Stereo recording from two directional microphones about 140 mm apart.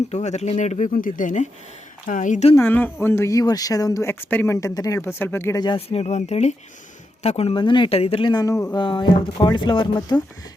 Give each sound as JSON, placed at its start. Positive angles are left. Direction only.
{"t": 0.1, "sound": "speech", "side_deg": 55}
{"t": 2.6, "sound": "speech", "side_deg": 15}
{"t": 5.5, "sound": "speech", "side_deg": 35}
{"t": 8.7, "sound": "speech", "side_deg": 35}